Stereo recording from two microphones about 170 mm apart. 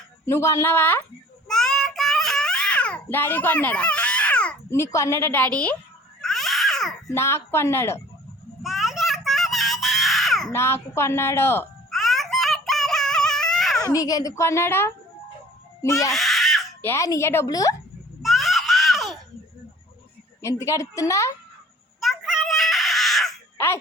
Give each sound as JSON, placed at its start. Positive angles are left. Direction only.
{"t": 0.3, "sound": "a woman's voice", "side_deg": 15}
{"t": 1.5, "sound": "child singing", "side_deg": 5}
{"t": 6.2, "sound": "babbling", "side_deg": 0}
{"t": 7.1, "sound": "a woman's voice", "side_deg": 15}
{"t": 8.6, "sound": "a sound", "side_deg": 0}
{"t": 10.5, "sound": "a woman's voice", "side_deg": 15}
{"t": 11.9, "sound": "music", "side_deg": 0}
{"t": 13.7, "sound": "a woman's voice", "side_deg": 20}
{"t": 16.1, "sound": "baby cry", "side_deg": 0}
{"t": 16.8, "sound": "speech", "side_deg": 15}
{"t": 18.2, "sound": "screaming", "side_deg": 0}
{"t": 20.4, "sound": "speech", "side_deg": 20}
{"t": 22.0, "sound": "a sound", "side_deg": 0}